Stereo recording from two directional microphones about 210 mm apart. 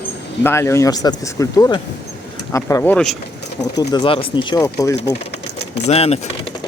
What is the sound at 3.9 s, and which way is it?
Speech, 20° left (ahead or behind).